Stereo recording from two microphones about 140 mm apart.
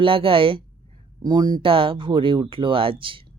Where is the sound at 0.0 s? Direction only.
40° right (ahead or behind).